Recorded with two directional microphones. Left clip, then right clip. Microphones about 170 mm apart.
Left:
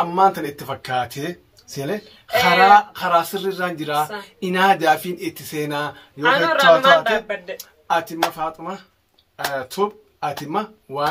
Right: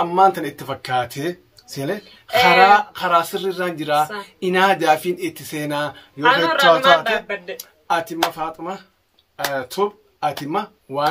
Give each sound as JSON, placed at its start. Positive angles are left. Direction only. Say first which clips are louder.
{"t": 0.1, "sound": "speech", "louder": "right 2 dB", "side_deg": -30}
{"t": 6.2, "sound": "a man's voice", "louder": "even", "side_deg": -5}
{"t": 7.9, "sound": "speech", "louder": "even", "side_deg": -30}